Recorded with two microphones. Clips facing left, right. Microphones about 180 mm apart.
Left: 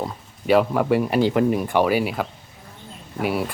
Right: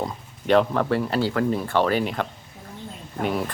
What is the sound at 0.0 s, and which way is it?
Speech, 5° left (ahead or behind).